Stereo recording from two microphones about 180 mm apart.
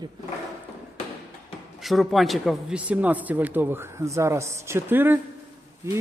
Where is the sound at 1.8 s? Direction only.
Centre (ahead or behind).